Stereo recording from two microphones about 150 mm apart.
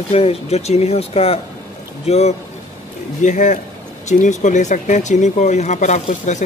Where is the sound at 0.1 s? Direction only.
45° left (ahead or behind).